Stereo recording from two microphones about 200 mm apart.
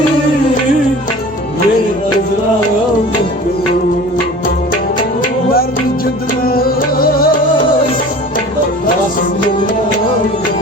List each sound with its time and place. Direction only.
7.0 s music: 45° left (ahead or behind)